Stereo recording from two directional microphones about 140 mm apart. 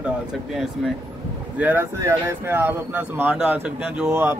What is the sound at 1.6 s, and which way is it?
Speech, 15° right (ahead or behind).